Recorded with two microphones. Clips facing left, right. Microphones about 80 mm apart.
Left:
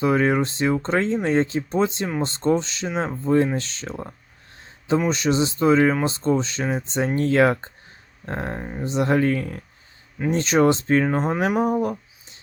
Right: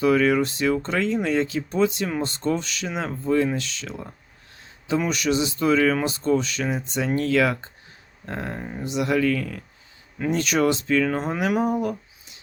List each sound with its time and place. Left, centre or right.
0.0 s speech: left